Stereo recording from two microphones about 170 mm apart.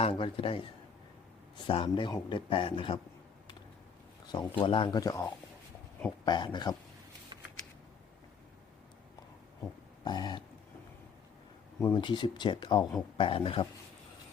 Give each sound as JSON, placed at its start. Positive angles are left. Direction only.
{"t": 0.0, "sound": "a man's voice", "side_deg": 30}
{"t": 4.3, "sound": "speech", "side_deg": 30}
{"t": 10.0, "sound": "speech", "side_deg": 25}
{"t": 11.9, "sound": "a man's voice", "side_deg": 30}